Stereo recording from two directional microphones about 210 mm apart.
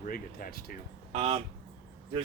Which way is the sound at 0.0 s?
45° left (ahead or behind).